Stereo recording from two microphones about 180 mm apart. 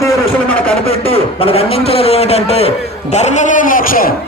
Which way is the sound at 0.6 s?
30° left (ahead or behind).